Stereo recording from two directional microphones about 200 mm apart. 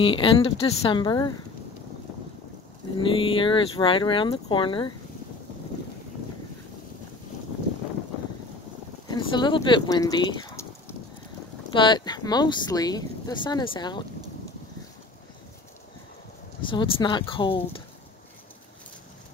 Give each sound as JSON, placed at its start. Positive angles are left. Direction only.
{"t": 0.0, "sound": "speech", "side_deg": 25}
{"t": 3.0, "sound": "speech", "side_deg": 25}
{"t": 9.1, "sound": "speech", "side_deg": 25}
{"t": 11.7, "sound": "speech", "side_deg": 25}
{"t": 16.6, "sound": "speech", "side_deg": 25}